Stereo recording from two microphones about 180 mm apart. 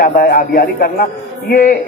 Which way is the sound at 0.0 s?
55° left (ahead or behind).